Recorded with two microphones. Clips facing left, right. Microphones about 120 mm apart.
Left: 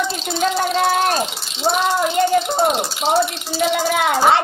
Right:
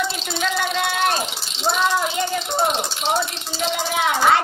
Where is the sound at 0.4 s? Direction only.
40° left (ahead or behind).